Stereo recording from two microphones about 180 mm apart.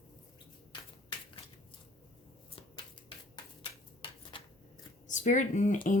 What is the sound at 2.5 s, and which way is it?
Shuffling cards, 30° left (ahead or behind).